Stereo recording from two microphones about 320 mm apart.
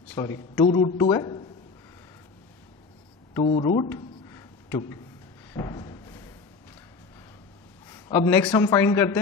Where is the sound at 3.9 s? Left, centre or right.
Centre.